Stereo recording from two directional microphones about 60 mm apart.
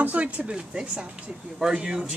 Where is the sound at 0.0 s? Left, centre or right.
Right.